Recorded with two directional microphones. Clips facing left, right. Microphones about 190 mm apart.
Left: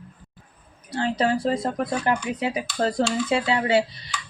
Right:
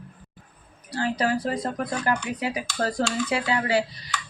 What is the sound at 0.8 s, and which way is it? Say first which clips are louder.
Speech: left 2 dB; 25° left (ahead or behind).